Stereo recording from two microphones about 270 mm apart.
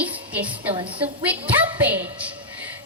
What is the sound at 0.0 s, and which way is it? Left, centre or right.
Music, centre.